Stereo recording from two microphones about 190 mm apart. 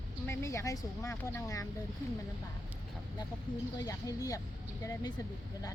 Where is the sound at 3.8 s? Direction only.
20° left (ahead or behind).